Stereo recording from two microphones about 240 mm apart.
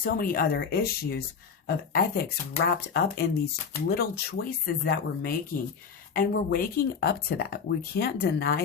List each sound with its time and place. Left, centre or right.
0.0 s speech: left